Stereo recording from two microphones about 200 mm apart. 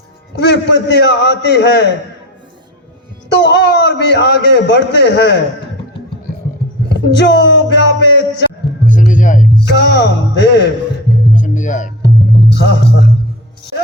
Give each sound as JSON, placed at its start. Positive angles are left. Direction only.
{"t": 0.3, "sound": "a man's voice", "side_deg": 60}
{"t": 3.2, "sound": "a man's voice", "side_deg": 60}
{"t": 6.8, "sound": "speech", "side_deg": 60}
{"t": 8.9, "sound": "music", "side_deg": 40}
{"t": 9.6, "sound": "a man's voice", "side_deg": 55}
{"t": 11.3, "sound": "music", "side_deg": 40}
{"t": 12.5, "sound": "speech", "side_deg": 60}